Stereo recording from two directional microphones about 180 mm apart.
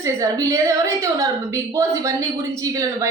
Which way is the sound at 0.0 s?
20° right (ahead or behind).